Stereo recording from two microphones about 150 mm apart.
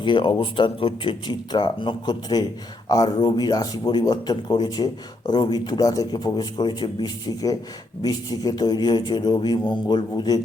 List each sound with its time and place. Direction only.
0.0 s speech: 35° left (ahead or behind)